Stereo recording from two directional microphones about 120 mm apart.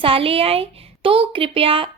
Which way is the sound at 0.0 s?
50° right (ahead or behind).